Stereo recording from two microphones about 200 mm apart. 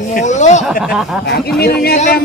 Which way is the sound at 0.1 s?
35° left (ahead or behind).